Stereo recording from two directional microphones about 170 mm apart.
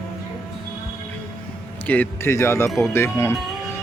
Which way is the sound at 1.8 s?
10° left (ahead or behind).